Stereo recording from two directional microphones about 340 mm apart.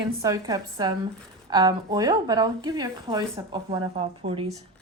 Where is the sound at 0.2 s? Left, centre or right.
Centre.